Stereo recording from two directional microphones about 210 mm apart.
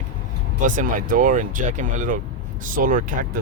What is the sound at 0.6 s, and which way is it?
Speech, 40° right (ahead or behind).